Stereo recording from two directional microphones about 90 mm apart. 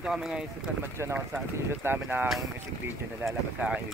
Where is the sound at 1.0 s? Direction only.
30° right (ahead or behind).